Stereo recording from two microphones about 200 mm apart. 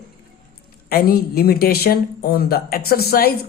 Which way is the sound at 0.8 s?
45° left (ahead or behind).